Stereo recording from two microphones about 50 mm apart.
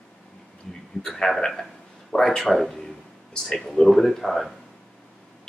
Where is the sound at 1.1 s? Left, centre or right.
Centre.